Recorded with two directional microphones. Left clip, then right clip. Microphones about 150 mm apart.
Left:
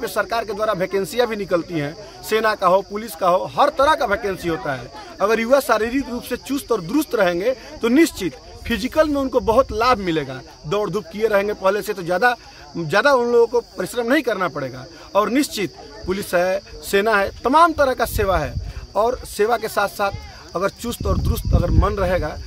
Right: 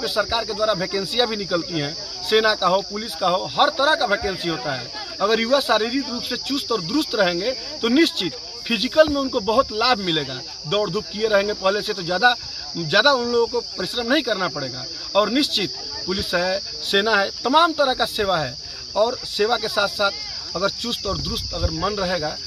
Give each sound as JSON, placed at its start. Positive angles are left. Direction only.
{"t": 0.0, "sound": "speech", "side_deg": 20}